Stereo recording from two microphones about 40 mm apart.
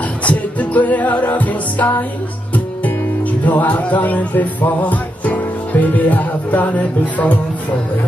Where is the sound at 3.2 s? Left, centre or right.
Left.